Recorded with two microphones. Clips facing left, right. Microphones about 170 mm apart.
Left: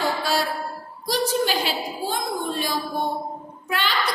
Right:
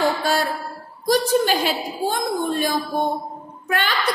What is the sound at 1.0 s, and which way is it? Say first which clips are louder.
A woman's voice: right 5 dB; 50° right (ahead or behind).